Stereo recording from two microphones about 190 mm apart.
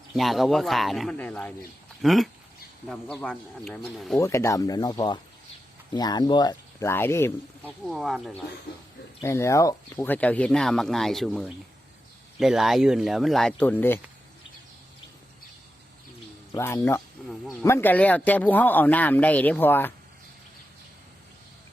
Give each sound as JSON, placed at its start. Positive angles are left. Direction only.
{"t": 0.1, "sound": "speech", "side_deg": 0}
{"t": 4.2, "sound": "speech", "side_deg": 15}
{"t": 7.9, "sound": "speech", "side_deg": 0}
{"t": 9.2, "sound": "speech", "side_deg": 15}
{"t": 16.6, "sound": "speech", "side_deg": 15}
{"t": 17.2, "sound": "speech", "side_deg": 0}
{"t": 17.6, "sound": "speech", "side_deg": 10}